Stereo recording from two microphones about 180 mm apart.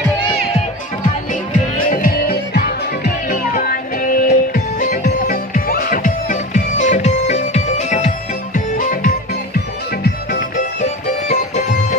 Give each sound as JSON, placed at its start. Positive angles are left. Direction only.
{"t": 1.5, "sound": "music", "side_deg": 50}
{"t": 10.6, "sound": "music", "side_deg": 40}